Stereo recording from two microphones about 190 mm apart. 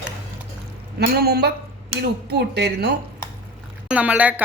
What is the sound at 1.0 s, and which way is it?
Speech, 55° right (ahead or behind).